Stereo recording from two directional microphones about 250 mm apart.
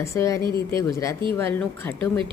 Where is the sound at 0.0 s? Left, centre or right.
Centre.